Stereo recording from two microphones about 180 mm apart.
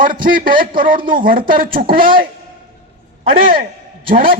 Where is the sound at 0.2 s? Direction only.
50° right (ahead or behind).